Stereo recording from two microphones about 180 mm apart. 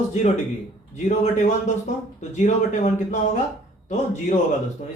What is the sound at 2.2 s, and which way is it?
Speech, 40° left (ahead or behind).